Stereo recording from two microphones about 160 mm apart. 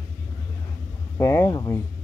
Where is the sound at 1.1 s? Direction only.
15° left (ahead or behind).